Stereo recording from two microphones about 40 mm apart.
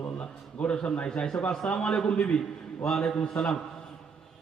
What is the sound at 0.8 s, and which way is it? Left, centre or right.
Speech, left.